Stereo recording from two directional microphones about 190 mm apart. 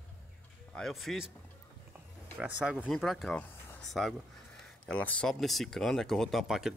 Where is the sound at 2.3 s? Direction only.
5° right (ahead or behind).